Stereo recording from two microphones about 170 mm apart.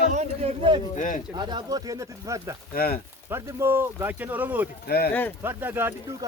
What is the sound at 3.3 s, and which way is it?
Speech, 15° right (ahead or behind).